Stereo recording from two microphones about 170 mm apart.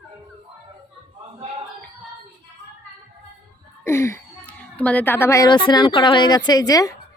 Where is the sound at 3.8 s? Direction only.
15° left (ahead or behind).